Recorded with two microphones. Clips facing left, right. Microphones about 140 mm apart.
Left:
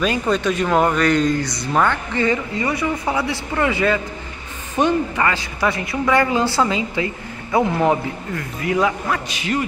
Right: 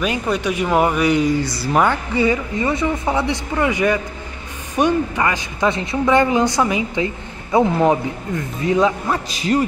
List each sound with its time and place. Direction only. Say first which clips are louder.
0.0 s speech: left 1 dB; 15° right (ahead or behind)
2.6 s speech: right 4 dB; 25° right (ahead or behind)
9.3 s a man's voice: right 4 dB; 35° right (ahead or behind)